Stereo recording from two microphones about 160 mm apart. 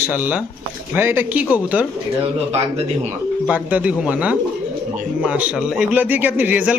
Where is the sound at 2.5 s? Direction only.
40° right (ahead or behind).